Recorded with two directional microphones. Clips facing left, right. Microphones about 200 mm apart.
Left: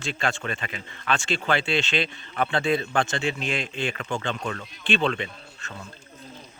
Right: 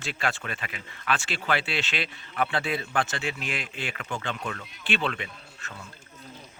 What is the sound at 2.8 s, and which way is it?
Speech, 25° left (ahead or behind).